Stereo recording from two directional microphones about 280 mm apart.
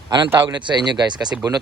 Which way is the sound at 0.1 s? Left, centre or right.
Centre.